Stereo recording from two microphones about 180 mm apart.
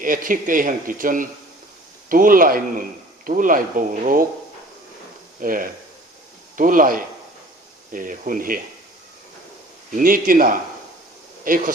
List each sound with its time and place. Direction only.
0.0 s speech: 50° right (ahead or behind)
5.4 s speech: 50° right (ahead or behind)
9.9 s speech: 50° right (ahead or behind)